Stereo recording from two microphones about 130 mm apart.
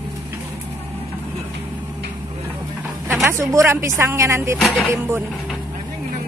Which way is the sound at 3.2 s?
20° right (ahead or behind).